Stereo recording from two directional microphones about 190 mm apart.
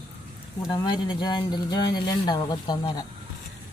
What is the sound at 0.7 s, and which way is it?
Speech, 20° left (ahead or behind).